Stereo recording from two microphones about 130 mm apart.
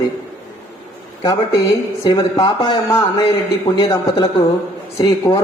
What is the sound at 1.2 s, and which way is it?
Speech, 35° left (ahead or behind).